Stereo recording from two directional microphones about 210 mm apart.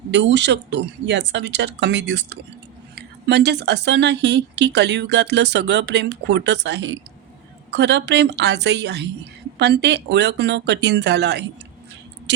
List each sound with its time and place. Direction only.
0.1 s speech: 55° right (ahead or behind)